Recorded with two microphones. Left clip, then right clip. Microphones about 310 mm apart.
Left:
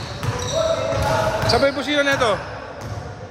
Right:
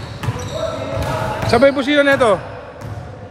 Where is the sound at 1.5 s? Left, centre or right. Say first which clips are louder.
Right 9 dB; right.